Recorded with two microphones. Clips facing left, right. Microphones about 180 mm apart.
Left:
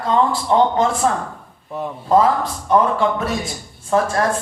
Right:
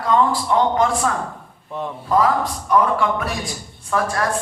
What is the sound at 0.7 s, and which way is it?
Speech, 25° left (ahead or behind).